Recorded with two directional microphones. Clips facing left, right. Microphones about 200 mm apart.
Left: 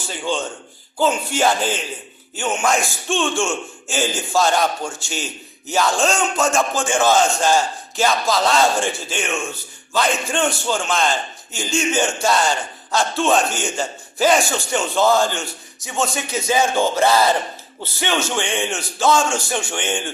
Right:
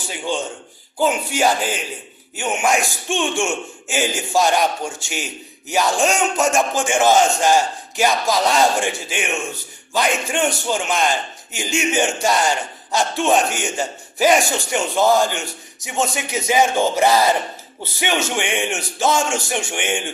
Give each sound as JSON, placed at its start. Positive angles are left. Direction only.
{"t": 0.9, "sound": "a man's voice", "side_deg": -10}